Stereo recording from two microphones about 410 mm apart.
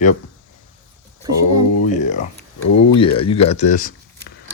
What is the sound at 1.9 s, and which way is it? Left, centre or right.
Speech, centre.